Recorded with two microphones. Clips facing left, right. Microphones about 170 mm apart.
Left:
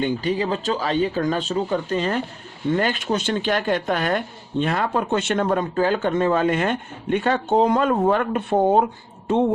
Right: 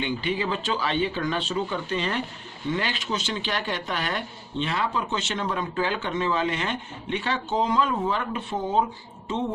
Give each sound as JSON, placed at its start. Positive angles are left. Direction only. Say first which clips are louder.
{"t": 0.0, "sound": "speech", "louder": "left 5 dB", "side_deg": 40}